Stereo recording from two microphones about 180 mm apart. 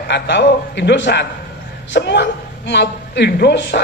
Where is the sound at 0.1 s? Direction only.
70° left (ahead or behind).